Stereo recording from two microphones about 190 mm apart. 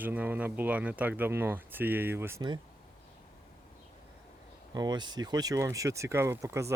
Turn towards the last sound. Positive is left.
turn(degrees=-15)  # may be behind; listen again after turning